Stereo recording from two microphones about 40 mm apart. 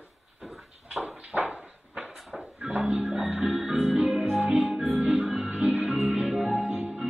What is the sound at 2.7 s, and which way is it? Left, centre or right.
Music, right.